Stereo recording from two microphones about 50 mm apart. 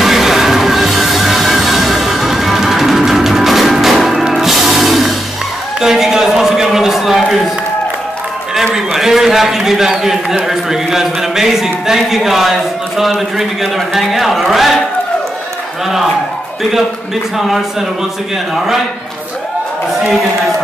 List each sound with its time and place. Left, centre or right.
0.0 s music: centre
5.8 s a sound: centre
8.7 s a man's voice: centre
17.4 s a man's voice: centre